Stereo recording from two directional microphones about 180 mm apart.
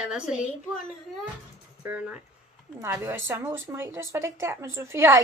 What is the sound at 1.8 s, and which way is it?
A woman's voice, 10° right (ahead or behind).